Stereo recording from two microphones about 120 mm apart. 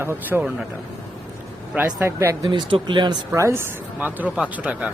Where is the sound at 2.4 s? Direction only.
40° right (ahead or behind).